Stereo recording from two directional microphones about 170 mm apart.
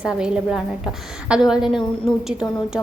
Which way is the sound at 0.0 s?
5° right (ahead or behind).